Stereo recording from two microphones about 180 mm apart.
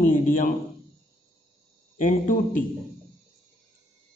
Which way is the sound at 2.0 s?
45° left (ahead or behind).